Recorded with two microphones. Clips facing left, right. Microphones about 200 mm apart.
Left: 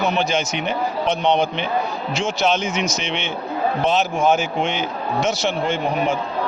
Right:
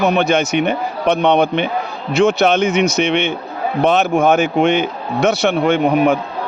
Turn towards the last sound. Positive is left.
turn(degrees=-60)  # may be behind; listen again after turning